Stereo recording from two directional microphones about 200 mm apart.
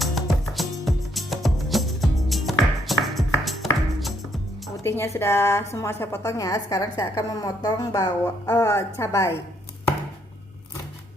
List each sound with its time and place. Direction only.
0.0 s music: centre (ahead or behind)
4.8 s a woman's voice: 10° left (ahead or behind)